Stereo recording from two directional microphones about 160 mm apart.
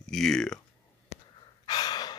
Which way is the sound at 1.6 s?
25° left (ahead or behind).